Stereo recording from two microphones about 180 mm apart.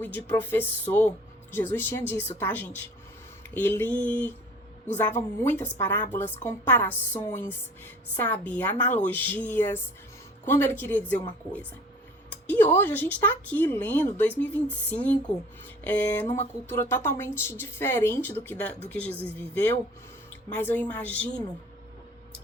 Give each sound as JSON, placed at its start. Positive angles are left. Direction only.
{"t": 0.3, "sound": "speech", "side_deg": 10}
{"t": 12.5, "sound": "speech", "side_deg": 10}
{"t": 16.2, "sound": "a sound", "side_deg": 40}
{"t": 16.6, "sound": "speech", "side_deg": 15}
{"t": 19.1, "sound": "speech", "side_deg": -10}
{"t": 19.4, "sound": "speech", "side_deg": 10}